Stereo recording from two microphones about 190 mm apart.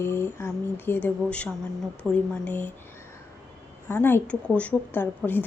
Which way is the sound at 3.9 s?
10° left (ahead or behind).